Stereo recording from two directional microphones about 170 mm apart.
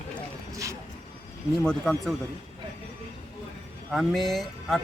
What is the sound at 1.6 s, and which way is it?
Speech, 5° left (ahead or behind).